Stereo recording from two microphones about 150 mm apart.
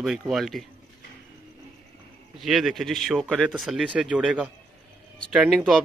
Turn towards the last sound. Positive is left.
turn(degrees=-5)  # may be behind; listen again after turning